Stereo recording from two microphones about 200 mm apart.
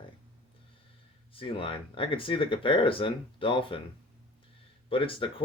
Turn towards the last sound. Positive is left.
turn(degrees=25)  # may be behind; listen again after turning